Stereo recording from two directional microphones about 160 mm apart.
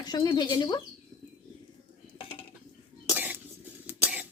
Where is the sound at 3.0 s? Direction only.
10° right (ahead or behind).